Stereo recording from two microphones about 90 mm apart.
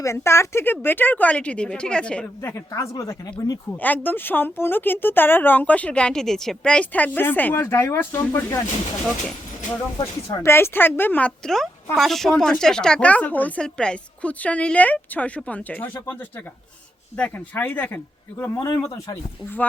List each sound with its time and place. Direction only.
0.0 s speech: 30° left (ahead or behind); by 2.2 s 10° left (ahead or behind)
2.4 s speech: 35° left (ahead or behind)
3.8 s speech: 20° left (ahead or behind); by 8.5 s 35° left (ahead or behind)
10.0 s speech: 30° left (ahead or behind)
11.4 s a woman's voice: 5° left (ahead or behind)
17.2 s speech: 15° left (ahead or behind)
18.7 s speech: 40° left (ahead or behind)